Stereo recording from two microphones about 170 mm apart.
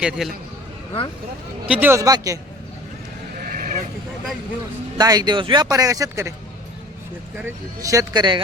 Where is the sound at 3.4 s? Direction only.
55° right (ahead or behind).